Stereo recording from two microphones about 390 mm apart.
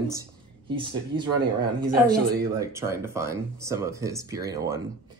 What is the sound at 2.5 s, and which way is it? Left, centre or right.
A woman's voice, centre.